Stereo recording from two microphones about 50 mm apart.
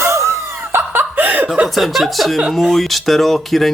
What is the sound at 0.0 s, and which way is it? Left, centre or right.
Cough, right.